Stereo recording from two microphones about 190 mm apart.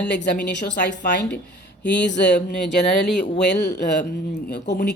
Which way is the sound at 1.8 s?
65° left (ahead or behind).